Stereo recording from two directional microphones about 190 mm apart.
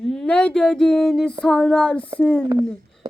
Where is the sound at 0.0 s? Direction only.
Centre (ahead or behind).